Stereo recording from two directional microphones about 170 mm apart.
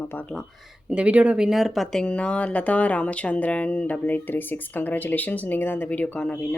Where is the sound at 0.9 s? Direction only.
5° right (ahead or behind).